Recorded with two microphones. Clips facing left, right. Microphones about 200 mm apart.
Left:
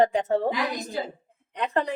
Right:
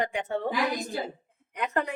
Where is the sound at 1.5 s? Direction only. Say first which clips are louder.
Left 3 dB; 30° left (ahead or behind).